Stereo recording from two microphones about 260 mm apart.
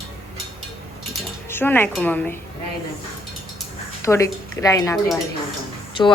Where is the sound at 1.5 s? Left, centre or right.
Centre.